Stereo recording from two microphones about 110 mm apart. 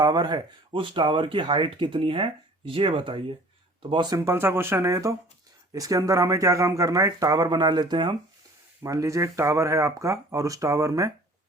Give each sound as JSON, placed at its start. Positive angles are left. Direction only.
{"t": 0.0, "sound": "speech", "side_deg": -40}
{"t": 4.2, "sound": "speech", "side_deg": -25}
{"t": 8.8, "sound": "speech", "side_deg": -30}